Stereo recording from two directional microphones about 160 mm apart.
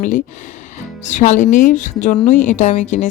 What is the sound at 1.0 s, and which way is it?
Speech, 50° left (ahead or behind).